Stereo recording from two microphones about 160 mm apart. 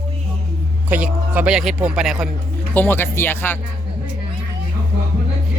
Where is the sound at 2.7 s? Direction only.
15° left (ahead or behind).